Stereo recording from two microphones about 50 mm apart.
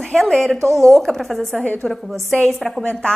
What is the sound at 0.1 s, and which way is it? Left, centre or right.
A woman's voice, centre.